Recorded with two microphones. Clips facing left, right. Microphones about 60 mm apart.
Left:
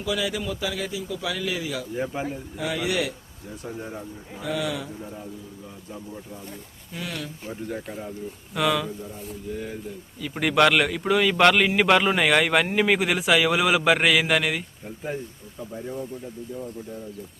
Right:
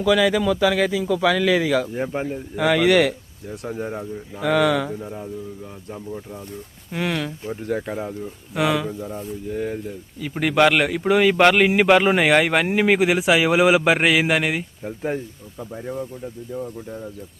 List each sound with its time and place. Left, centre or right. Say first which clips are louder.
0.0 s a man's voice: right 10 dB; right
1.9 s speech: right 3 dB; right
2.6 s a man's voice: right 10 dB; right
3.7 s speech: right 7 dB; right
3.9 s a man's voice: right 6 dB; right
6.9 s speech: right 9 dB; right
8.5 s speech: right 3 dB; centre
9.5 s speech: right 6 dB; right
10.3 s speech: right 2 dB; centre
11.1 s speech: right 5 dB; right
11.3 s speech: right 3 dB; centre
14.8 s speech: right 7 dB; right